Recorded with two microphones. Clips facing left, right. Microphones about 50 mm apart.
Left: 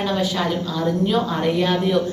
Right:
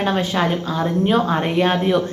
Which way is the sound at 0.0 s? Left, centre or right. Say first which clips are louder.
Right 2 dB; right.